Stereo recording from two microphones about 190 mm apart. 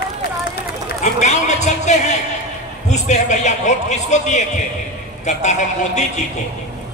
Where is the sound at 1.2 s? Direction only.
35° left (ahead or behind).